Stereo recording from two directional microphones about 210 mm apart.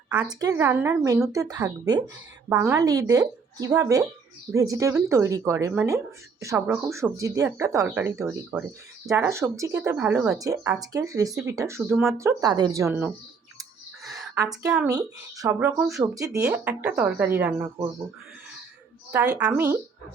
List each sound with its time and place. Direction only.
0.1 s a woman's voice: 5° right (ahead or behind)
14.0 s a sound: centre (ahead or behind)
14.3 s speech: 15° right (ahead or behind)
19.1 s a woman's voice: 5° right (ahead or behind)